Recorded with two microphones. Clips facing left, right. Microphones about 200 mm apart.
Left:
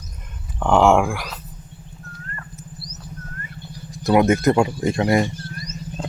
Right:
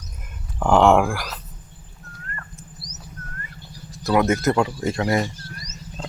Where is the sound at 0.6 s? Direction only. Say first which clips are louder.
Even; centre (ahead or behind).